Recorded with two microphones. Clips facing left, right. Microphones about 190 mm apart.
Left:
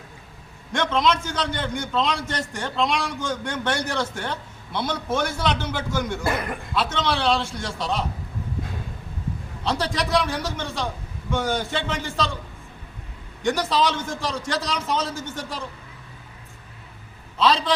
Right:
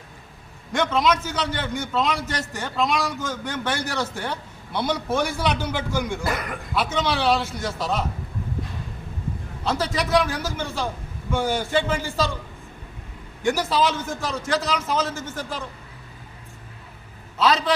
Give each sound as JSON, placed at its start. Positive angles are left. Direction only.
{"t": 0.7, "sound": "a man's voice", "side_deg": -5}
{"t": 9.6, "sound": "a man's voice", "side_deg": -5}
{"t": 13.4, "sound": "a man's voice", "side_deg": -5}
{"t": 17.3, "sound": "a man's voice", "side_deg": -5}